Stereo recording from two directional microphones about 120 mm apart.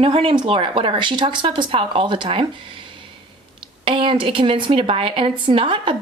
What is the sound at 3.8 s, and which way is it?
Speech, 45° right (ahead or behind).